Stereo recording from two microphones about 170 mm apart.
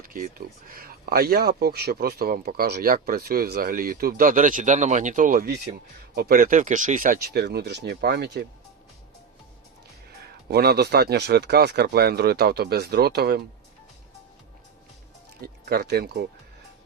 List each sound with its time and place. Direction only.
0.0 s speech: 55° right (ahead or behind); by 8.4 s 75° right (ahead or behind)
10.5 s speech: 70° right (ahead or behind)
15.6 s speech: 70° right (ahead or behind)